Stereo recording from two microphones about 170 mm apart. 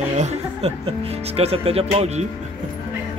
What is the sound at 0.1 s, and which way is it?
Speech, 40° right (ahead or behind).